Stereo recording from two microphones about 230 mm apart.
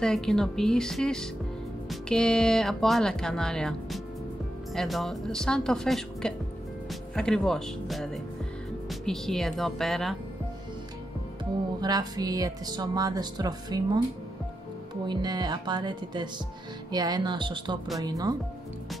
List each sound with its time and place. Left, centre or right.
0.0 s speech: centre
11.8 s speech: centre
15.0 s speech: centre